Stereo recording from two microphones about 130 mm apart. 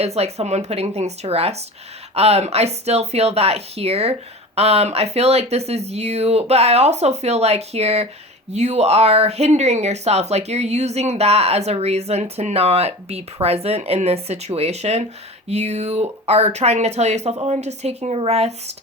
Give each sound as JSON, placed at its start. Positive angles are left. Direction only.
{"t": 0.0, "sound": "speech", "side_deg": -55}